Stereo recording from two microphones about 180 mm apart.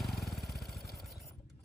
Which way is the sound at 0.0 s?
Centre (ahead or behind).